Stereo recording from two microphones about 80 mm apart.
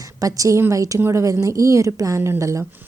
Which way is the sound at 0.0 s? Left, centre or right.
Right.